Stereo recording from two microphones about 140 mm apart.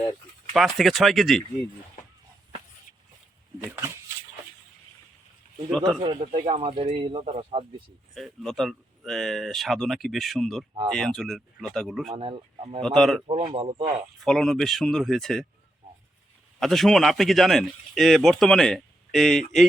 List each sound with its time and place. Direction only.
0.5 s speech: centre (ahead or behind)
3.6 s speech: 20° right (ahead or behind)
6.0 s speech: 40° right (ahead or behind)
8.1 s speech: centre (ahead or behind)
12.1 s speech: 40° right (ahead or behind)
12.8 s speech: centre (ahead or behind)
13.2 s speech: 35° right (ahead or behind)
14.2 s speech: centre (ahead or behind)
16.6 s speech: centre (ahead or behind)